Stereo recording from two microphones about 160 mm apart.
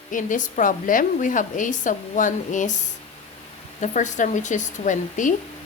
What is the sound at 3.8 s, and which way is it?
A woman's voice, 50° left (ahead or behind).